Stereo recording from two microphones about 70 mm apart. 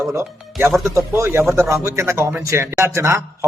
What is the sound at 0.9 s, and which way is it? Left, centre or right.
Speech, right.